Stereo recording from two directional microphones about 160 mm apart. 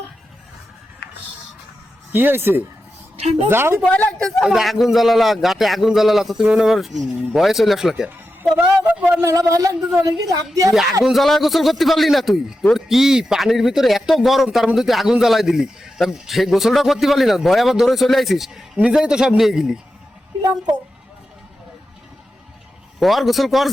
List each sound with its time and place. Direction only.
2.1 s speech: 15° right (ahead or behind)
3.8 s a man's voice: 5° left (ahead or behind); by 9.2 s 10° right (ahead or behind)
9.2 s a woman's voice: 20° right (ahead or behind)
9.7 s a man's voice: 5° right (ahead or behind)
10.0 s a woman's voice: 20° right (ahead or behind)
11.0 s a man's voice: centre (ahead or behind)
23.0 s a man's voice: centre (ahead or behind)